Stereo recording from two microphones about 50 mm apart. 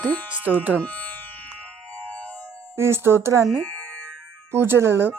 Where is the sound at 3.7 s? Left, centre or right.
Left.